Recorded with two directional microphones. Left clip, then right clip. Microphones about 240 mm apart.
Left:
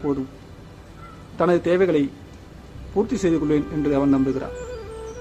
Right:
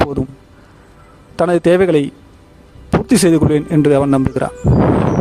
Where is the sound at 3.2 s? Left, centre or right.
Right.